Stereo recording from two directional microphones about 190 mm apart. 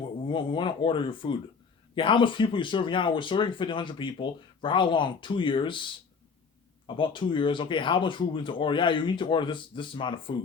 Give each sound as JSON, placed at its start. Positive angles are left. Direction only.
{"t": 0.3, "sound": "speech", "side_deg": 25}